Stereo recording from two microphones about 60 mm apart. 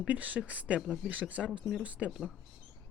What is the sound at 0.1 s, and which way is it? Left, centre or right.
Speech, right.